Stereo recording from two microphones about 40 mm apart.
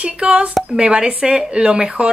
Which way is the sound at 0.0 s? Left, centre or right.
Right.